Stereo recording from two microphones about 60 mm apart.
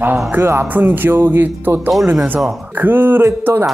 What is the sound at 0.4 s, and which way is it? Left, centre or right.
Speech, right.